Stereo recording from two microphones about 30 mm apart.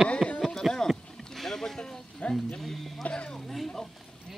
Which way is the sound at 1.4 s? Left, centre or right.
Centre.